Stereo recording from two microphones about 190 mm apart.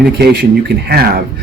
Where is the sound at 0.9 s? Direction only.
55° right (ahead or behind).